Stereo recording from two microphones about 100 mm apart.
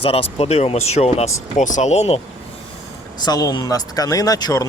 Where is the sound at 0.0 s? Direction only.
75° left (ahead or behind); by 2.2 s 90° left.